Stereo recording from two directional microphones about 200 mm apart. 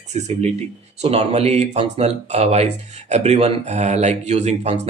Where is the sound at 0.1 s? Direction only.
35° right (ahead or behind).